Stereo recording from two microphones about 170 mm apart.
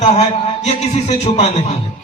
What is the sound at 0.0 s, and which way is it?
A man's voice, 40° left (ahead or behind).